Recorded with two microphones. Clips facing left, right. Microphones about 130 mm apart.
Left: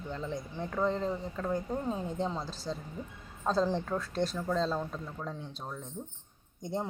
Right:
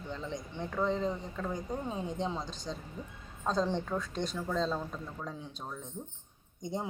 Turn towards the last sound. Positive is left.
turn(degrees=0)  # may be behind; listen again after turning